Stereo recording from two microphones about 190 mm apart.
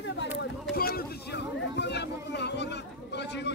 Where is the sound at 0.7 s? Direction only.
55° left (ahead or behind).